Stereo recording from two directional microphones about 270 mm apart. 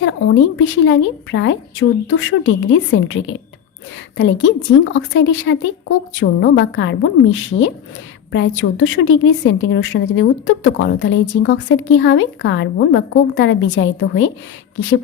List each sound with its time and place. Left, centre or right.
0.0 s a woman's voice: left